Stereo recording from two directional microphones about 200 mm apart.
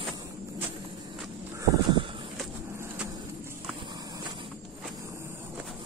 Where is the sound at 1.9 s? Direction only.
25° right (ahead or behind).